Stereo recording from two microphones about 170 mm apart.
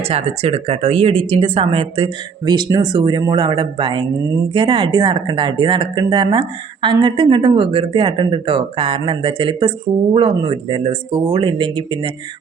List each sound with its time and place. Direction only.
0.0 s speech: 35° right (ahead or behind)